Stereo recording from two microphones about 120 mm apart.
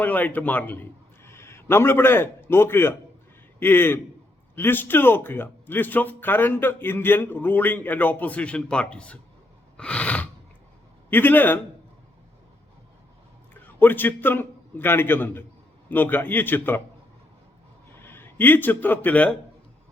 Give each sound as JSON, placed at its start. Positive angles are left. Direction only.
{"t": 0.0, "sound": "a man's voice", "side_deg": 15}
{"t": 9.7, "sound": "gasp", "side_deg": 10}
{"t": 11.1, "sound": "speech", "side_deg": 15}
{"t": 13.5, "sound": "a man's voice", "side_deg": 15}
{"t": 18.0, "sound": "speech", "side_deg": 20}